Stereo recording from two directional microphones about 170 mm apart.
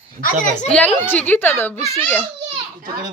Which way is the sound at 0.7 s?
5° left (ahead or behind).